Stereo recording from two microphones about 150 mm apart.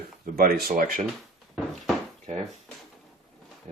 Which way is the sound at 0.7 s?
65° right (ahead or behind).